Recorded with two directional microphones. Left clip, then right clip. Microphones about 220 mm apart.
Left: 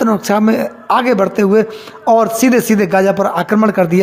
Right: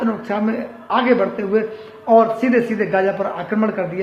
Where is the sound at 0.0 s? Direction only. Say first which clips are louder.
Left 8 dB; 50° left (ahead or behind).